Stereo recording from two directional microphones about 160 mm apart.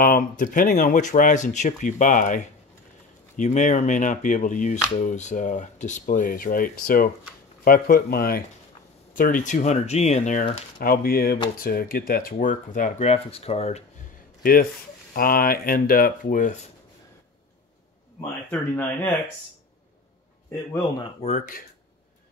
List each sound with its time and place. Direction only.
0.0 s speech: 60° left (ahead or behind)
10.8 s speech: 65° left (ahead or behind); by 13.8 s 40° left (ahead or behind)
14.4 s speech: 65° left (ahead or behind)
18.2 s speech: 15° left (ahead or behind)
21.2 s speech: 50° left (ahead or behind)